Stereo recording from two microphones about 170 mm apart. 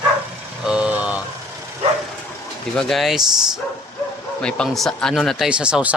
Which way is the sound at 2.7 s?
Centre (ahead or behind).